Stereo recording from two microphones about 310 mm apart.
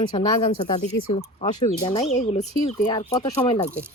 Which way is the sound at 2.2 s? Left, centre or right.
Left.